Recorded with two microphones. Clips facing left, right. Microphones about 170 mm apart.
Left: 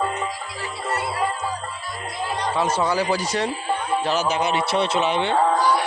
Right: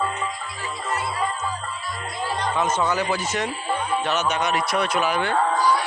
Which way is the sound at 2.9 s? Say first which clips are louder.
Left 2 dB; 35° left (ahead or behind).